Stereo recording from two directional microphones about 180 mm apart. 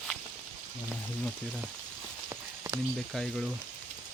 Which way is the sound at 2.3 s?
15° right (ahead or behind).